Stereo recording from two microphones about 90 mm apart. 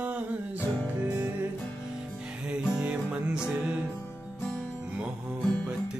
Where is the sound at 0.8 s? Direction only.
20° right (ahead or behind).